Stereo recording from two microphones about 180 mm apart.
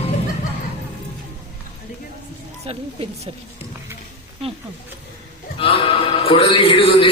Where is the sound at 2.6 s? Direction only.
35° right (ahead or behind).